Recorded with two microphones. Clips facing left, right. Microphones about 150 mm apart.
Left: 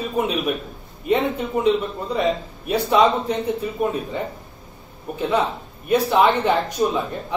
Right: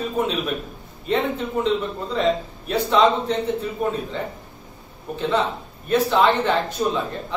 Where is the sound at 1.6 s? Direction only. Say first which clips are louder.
Left 3 dB; 15° left (ahead or behind).